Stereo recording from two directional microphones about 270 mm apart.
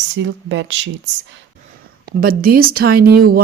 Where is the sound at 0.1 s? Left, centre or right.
Right.